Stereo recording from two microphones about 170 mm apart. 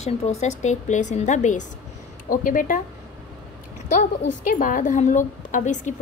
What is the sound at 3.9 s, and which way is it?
A woman's voice, 45° left (ahead or behind).